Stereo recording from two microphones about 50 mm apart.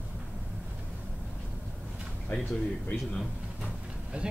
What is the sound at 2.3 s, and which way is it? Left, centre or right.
Speech, left.